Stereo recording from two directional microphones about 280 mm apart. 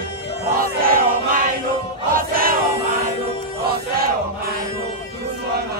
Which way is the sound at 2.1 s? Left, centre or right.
Right.